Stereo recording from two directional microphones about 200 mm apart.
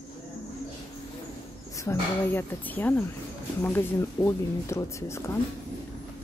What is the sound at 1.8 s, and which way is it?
A woman's voice, 10° left (ahead or behind).